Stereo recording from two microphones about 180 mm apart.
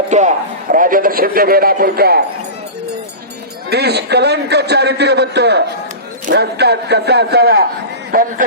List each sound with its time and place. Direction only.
0.1 s a man's voice: 45° right (ahead or behind); by 2.2 s 60° right (ahead or behind)
3.7 s a man's voice: 65° right (ahead or behind)